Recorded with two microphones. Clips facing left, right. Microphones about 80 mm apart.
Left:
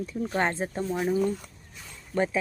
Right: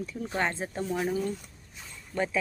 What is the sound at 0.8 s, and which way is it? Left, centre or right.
Speech, centre.